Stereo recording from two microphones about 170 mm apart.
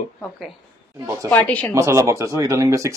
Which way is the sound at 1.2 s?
10° left (ahead or behind).